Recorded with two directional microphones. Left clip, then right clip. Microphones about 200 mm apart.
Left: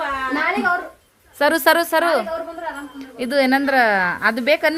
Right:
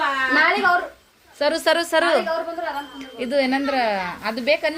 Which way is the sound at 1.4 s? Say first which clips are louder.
Left 4 dB; 30° left (ahead or behind).